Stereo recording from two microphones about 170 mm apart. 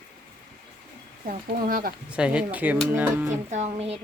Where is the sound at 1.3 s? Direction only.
55° right (ahead or behind).